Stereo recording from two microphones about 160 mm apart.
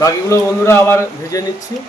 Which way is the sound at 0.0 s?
20° left (ahead or behind).